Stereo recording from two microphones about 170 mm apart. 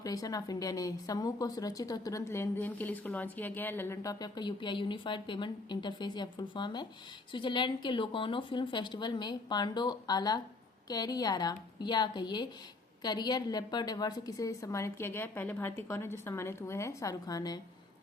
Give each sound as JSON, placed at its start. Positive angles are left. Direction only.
{"t": 0.0, "sound": "a woman's voice", "side_deg": 20}